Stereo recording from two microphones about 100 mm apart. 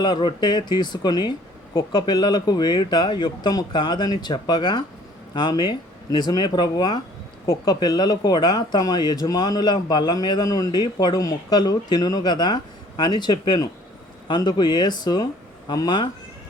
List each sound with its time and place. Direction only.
0.0 s speech: 50° left (ahead or behind)